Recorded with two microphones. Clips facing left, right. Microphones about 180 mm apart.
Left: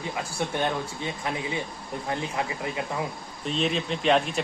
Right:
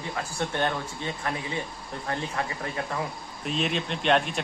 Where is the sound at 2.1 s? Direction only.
15° left (ahead or behind).